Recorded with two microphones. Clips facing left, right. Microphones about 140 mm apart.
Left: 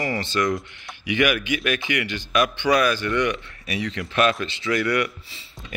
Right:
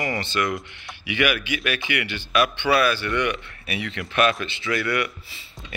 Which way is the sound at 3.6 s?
35° left (ahead or behind).